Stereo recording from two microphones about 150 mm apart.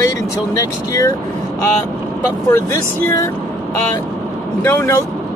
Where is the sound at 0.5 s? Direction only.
20° left (ahead or behind).